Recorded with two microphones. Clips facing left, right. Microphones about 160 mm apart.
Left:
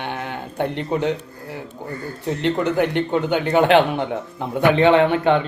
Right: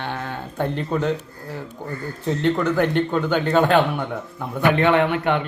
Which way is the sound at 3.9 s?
25° left (ahead or behind).